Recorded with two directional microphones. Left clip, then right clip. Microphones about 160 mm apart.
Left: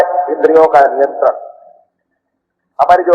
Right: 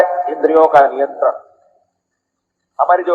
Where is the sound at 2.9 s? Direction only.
30° right (ahead or behind).